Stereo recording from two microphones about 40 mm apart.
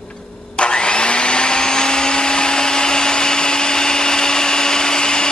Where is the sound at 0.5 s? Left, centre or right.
Left.